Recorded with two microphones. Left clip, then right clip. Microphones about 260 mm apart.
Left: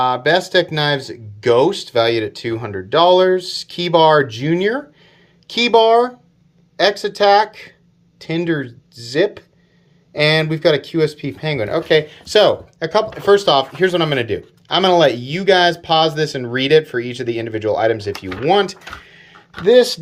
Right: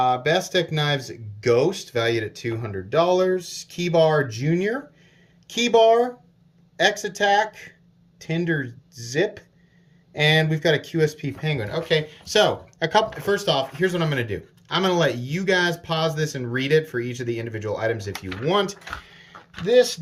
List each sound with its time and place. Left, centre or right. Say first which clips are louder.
0.0 s speech: left 5 dB; centre
3.4 s speech: left 10 dB; centre
3.9 s speech: left 7 dB; centre
12.8 s speech: left 3 dB; centre
19.6 s speech: left 6 dB; centre